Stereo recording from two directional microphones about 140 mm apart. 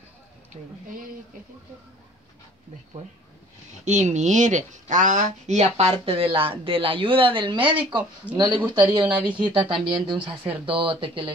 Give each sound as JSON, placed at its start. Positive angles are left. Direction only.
{"t": 0.5, "sound": "speech", "side_deg": -45}
{"t": 3.8, "sound": "speech", "side_deg": -60}
{"t": 8.2, "sound": "speech", "side_deg": 10}
{"t": 8.6, "sound": "speech", "side_deg": -30}